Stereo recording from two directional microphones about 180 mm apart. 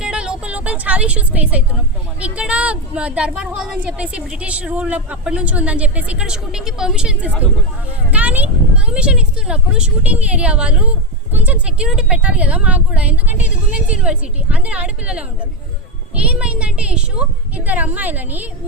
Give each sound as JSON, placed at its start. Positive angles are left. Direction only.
{"t": 0.0, "sound": "a sound", "side_deg": -5}
{"t": 2.2, "sound": "speech", "side_deg": -5}
{"t": 16.2, "sound": "speech", "side_deg": -5}